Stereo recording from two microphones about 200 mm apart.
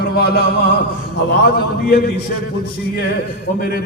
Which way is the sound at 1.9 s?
50° left (ahead or behind).